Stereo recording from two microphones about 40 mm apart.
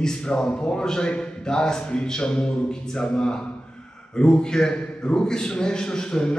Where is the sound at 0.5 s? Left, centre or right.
Left.